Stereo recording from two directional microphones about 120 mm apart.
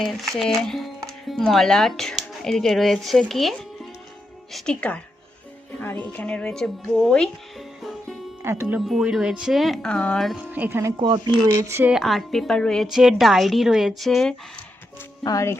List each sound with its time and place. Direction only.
0.0 s a woman's voice: centre (ahead or behind)
8.4 s speech: 20° right (ahead or behind)
8.9 s speech: 5° right (ahead or behind)
10.5 s speech: 15° right (ahead or behind)
11.0 s speech: 35° right (ahead or behind)
11.4 s speech: 20° right (ahead or behind)
11.9 s speech: centre (ahead or behind)
15.2 s speech: 30° left (ahead or behind)